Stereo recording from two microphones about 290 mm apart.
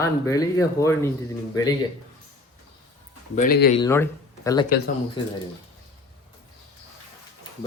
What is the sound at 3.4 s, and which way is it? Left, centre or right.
Speech, left.